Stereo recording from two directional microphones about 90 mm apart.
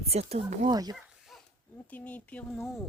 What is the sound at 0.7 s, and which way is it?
Speech, 45° right (ahead or behind).